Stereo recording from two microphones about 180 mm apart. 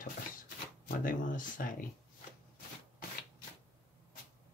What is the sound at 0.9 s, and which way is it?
Speech, 50° left (ahead or behind).